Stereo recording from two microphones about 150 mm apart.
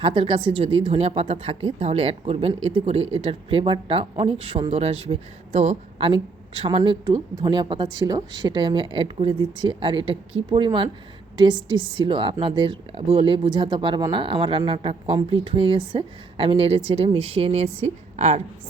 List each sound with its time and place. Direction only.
0.0 s speech: 35° right (ahead or behind)
6.1 s speech: 35° right (ahead or behind); by 18.4 s 50° right (ahead or behind)